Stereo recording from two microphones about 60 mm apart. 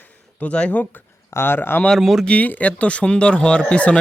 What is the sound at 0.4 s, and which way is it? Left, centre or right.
Speech, left.